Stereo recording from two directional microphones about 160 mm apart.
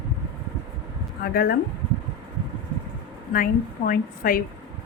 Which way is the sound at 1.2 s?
70° left (ahead or behind).